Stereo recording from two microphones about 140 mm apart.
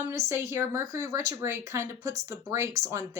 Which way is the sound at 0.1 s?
20° right (ahead or behind).